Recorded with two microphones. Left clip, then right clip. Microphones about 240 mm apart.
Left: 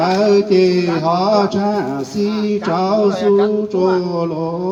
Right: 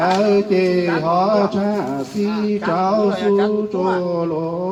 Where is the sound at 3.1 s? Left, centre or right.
Left.